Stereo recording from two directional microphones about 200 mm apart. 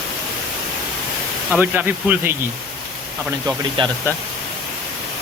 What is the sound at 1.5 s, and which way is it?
Speech, 10° right (ahead or behind).